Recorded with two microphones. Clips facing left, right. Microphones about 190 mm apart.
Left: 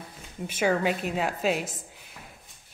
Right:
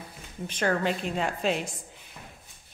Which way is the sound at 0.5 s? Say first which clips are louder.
Left 2 dB; 5° left (ahead or behind).